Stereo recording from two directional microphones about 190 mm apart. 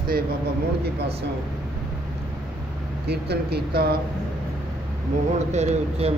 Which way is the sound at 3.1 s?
60° right (ahead or behind).